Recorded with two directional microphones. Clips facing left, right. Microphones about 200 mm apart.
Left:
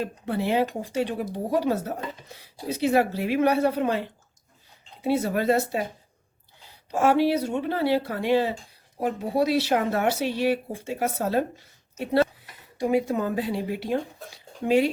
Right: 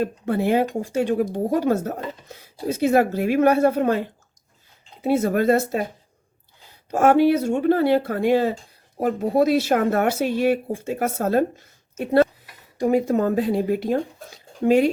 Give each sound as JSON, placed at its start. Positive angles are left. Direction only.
{"t": 0.0, "sound": "speech", "side_deg": -50}
{"t": 5.0, "sound": "speech", "side_deg": -50}
{"t": 6.9, "sound": "speech", "side_deg": -50}